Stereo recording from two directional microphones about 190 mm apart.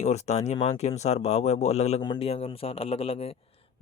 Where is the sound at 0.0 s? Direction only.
35° left (ahead or behind).